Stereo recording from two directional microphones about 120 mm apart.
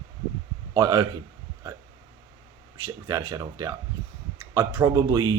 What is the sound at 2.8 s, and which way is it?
Speech, 25° right (ahead or behind).